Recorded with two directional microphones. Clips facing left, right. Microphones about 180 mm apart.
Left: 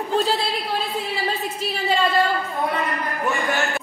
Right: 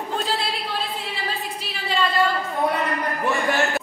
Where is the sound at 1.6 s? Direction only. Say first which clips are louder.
Left 6 dB; 45° left (ahead or behind).